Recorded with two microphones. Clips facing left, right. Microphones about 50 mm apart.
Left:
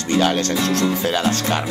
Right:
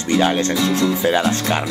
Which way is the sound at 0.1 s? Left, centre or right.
Right.